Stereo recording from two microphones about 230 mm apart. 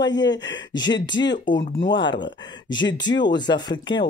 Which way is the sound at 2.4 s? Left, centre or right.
Centre.